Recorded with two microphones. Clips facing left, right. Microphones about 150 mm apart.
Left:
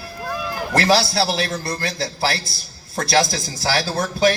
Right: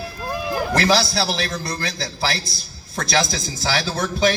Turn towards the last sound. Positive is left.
turn(degrees=40)  # may be behind; listen again after turning